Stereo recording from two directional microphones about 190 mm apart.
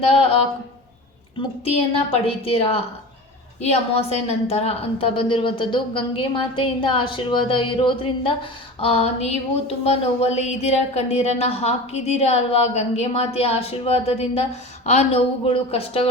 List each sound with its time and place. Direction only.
0.0 s speech: 30° left (ahead or behind)
1.4 s a woman's voice: 30° left (ahead or behind)